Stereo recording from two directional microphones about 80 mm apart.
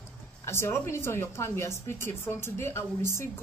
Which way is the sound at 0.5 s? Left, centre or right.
Left.